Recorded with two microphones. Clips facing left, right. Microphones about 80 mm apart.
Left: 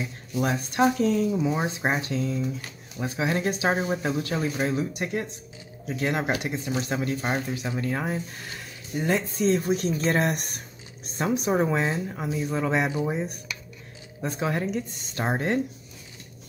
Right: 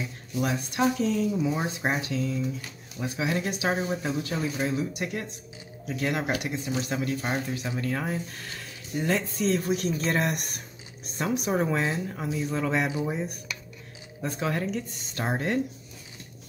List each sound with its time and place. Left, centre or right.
0.4 s speech: left